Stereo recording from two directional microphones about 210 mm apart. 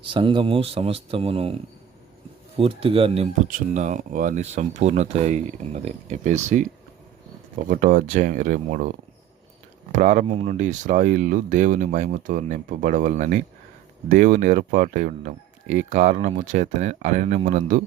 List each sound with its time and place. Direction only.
0.0 s speech: 25° right (ahead or behind)
7.7 s speech: 40° right (ahead or behind)